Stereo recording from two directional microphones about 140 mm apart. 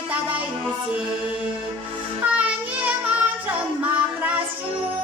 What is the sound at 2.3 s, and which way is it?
Child singing, 10° right (ahead or behind).